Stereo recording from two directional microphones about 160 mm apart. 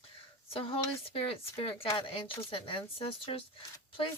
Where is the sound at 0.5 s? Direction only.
35° left (ahead or behind).